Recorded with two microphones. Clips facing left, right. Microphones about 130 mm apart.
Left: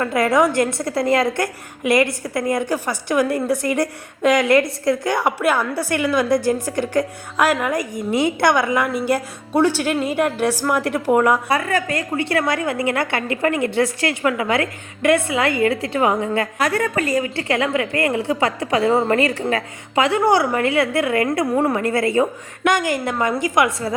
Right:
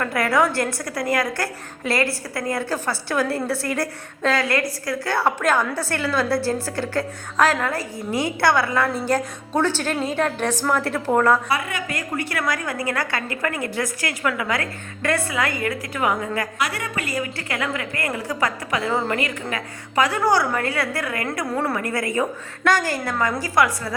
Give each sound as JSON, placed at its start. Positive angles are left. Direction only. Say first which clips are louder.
{"t": 0.0, "sound": "a woman's voice", "louder": "left 3 dB", "side_deg": 20}
{"t": 11.4, "sound": "a woman's voice", "louder": "left 5 dB", "side_deg": 40}
{"t": 16.6, "sound": "a woman's voice", "louder": "left 7 dB", "side_deg": 45}